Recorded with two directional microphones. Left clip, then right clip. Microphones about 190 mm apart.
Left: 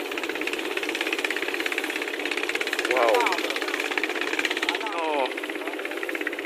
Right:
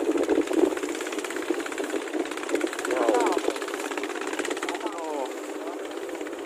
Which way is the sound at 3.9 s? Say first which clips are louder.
Left 4 dB; 75° right (ahead or behind).